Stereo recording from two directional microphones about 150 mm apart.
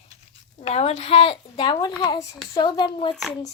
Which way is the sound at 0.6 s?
45° left (ahead or behind).